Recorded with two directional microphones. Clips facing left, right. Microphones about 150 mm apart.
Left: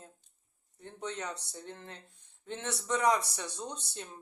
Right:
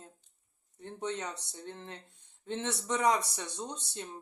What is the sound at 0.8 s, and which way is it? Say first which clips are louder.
A man's voice: right 3 dB; 20° right (ahead or behind).